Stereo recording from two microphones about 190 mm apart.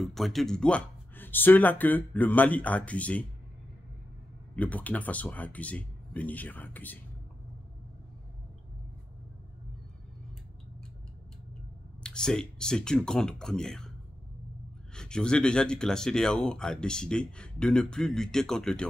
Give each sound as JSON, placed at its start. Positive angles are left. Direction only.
{"t": 0.0, "sound": "speech", "side_deg": 0}
{"t": 4.6, "sound": "speech", "side_deg": 10}
{"t": 12.0, "sound": "speech", "side_deg": 5}
{"t": 15.0, "sound": "speech", "side_deg": 5}